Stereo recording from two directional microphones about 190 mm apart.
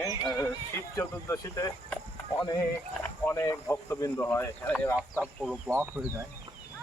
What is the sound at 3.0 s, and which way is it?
Speech, 10° left (ahead or behind).